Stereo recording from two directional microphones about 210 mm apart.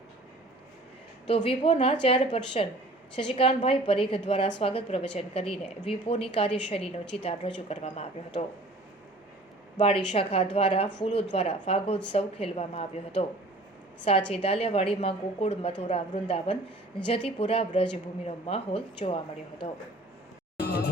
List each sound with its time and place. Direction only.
1.3 s a woman's voice: 25° left (ahead or behind)
9.7 s a woman's voice: 25° left (ahead or behind)
14.3 s a woman's voice: 25° left (ahead or behind)
20.6 s a sound: 45° left (ahead or behind)